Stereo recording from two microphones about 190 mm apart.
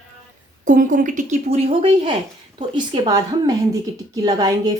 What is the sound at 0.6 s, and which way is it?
A woman's voice, 45° right (ahead or behind).